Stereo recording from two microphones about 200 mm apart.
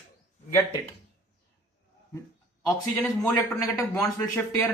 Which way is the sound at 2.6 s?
15° left (ahead or behind).